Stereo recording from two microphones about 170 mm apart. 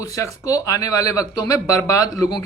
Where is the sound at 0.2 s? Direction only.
20° left (ahead or behind).